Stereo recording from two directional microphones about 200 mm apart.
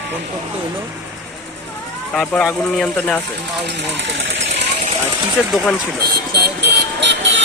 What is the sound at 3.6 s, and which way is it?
Speech, 60° right (ahead or behind).